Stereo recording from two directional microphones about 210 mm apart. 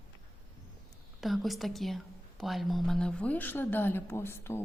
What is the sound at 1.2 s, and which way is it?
A woman's voice, centre (ahead or behind).